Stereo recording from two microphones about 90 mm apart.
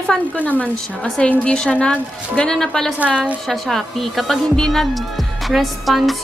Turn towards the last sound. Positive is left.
turn(degrees=0)  # may be behind; listen again after turning